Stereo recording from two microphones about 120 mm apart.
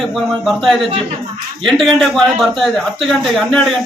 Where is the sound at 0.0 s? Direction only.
Centre (ahead or behind).